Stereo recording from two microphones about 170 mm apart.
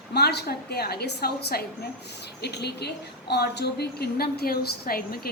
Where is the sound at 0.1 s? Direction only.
75° left (ahead or behind).